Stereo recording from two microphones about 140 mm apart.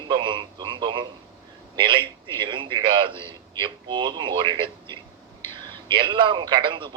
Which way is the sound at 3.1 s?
20° left (ahead or behind).